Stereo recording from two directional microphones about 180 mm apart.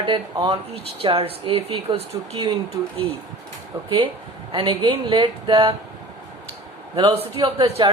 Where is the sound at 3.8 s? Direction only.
30° right (ahead or behind).